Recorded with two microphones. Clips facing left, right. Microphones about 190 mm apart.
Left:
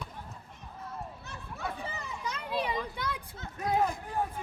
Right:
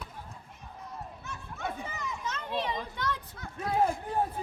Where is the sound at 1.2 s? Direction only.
35° left (ahead or behind).